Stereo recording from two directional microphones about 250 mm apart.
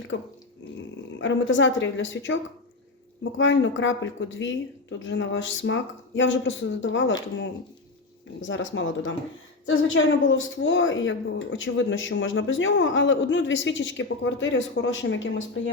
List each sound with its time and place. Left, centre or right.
0.1 s a woman's voice: left
8.4 s a woman's voice: left